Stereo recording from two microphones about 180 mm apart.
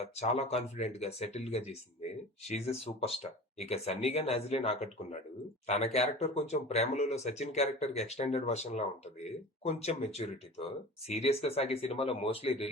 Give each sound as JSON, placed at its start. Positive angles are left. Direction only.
{"t": 0.0, "sound": "speech", "side_deg": 35}